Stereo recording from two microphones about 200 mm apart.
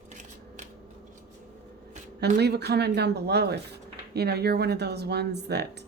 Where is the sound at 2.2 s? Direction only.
55° right (ahead or behind).